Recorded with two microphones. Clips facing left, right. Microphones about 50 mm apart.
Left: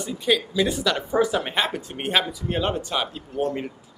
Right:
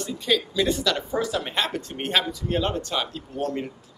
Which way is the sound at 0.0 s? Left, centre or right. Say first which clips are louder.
Left 2 dB; centre.